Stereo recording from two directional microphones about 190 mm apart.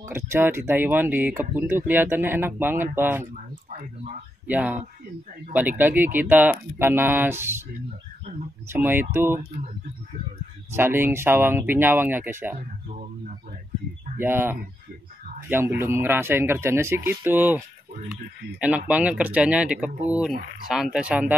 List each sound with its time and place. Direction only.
0.0 s speech: 10° right (ahead or behind)
4.5 s speech: 10° right (ahead or behind)
8.3 s speech: 40° right (ahead or behind)
8.6 s speech: 10° right (ahead or behind)
10.7 s speech: 10° right (ahead or behind)
14.2 s speech: 10° right (ahead or behind)
18.6 s speech: 5° right (ahead or behind)